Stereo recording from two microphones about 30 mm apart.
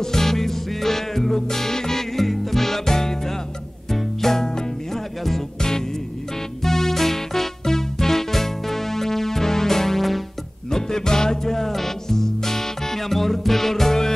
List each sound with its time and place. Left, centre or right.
0.0 s music: centre
10.7 s music: left